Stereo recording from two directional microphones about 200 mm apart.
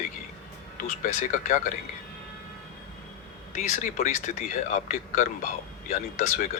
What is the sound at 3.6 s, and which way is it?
Speech, 35° left (ahead or behind).